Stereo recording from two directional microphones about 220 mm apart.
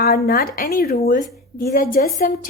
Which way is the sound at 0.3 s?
40° left (ahead or behind).